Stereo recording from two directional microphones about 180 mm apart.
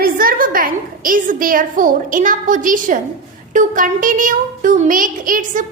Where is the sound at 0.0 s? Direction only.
55° right (ahead or behind).